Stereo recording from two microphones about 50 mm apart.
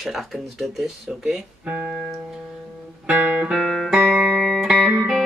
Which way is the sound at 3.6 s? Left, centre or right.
Centre.